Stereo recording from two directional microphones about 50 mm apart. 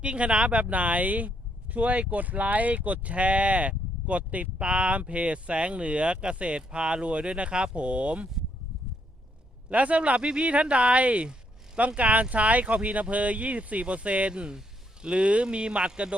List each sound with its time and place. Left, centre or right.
0.0 s speech: right
9.6 s speech: right